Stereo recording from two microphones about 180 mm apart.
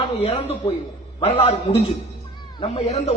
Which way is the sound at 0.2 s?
35° left (ahead or behind).